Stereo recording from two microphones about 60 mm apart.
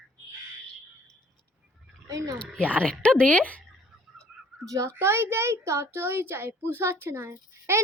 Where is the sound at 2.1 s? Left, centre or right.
Right.